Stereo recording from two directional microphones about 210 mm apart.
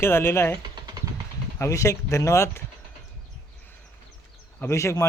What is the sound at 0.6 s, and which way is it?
Vehicle, 20° right (ahead or behind).